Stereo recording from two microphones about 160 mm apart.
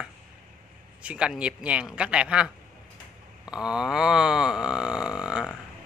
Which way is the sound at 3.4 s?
5° right (ahead or behind).